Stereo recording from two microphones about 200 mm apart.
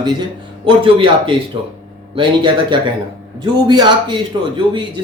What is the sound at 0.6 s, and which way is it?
Speech, 25° right (ahead or behind).